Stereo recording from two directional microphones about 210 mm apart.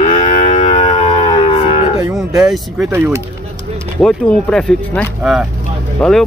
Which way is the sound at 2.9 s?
10° right (ahead or behind).